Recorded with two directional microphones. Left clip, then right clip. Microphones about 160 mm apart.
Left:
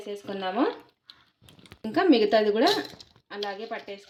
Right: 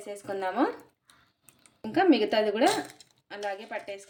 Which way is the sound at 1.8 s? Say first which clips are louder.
Left 2 dB; 35° left (ahead or behind).